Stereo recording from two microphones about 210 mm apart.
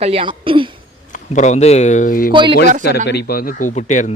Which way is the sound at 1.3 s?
35° left (ahead or behind).